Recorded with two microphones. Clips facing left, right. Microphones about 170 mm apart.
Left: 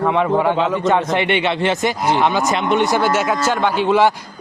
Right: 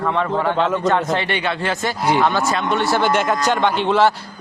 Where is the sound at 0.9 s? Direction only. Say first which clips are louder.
Left 3 dB; 20° left (ahead or behind).